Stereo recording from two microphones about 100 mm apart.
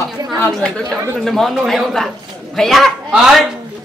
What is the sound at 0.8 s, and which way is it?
Speech, 25° right (ahead or behind).